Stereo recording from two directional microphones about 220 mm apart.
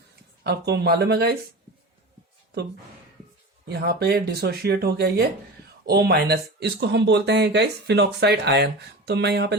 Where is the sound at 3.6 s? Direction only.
45° right (ahead or behind).